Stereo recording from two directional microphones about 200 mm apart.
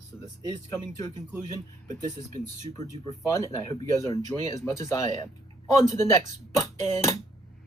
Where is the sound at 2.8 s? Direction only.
15° left (ahead or behind).